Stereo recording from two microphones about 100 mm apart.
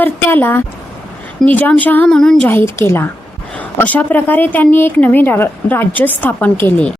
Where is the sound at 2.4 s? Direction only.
25° left (ahead or behind).